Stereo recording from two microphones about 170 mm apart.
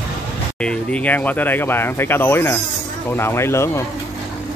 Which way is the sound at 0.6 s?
5° left (ahead or behind).